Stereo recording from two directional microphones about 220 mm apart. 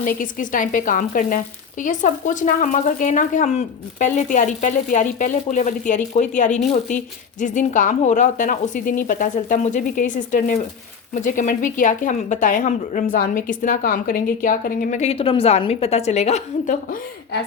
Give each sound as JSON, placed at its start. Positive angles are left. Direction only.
{"t": 0.0, "sound": "speech", "side_deg": 40}